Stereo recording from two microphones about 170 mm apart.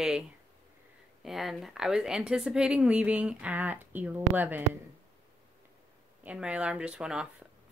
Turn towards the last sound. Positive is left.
turn(degrees=-5)  # may be behind; listen again after turning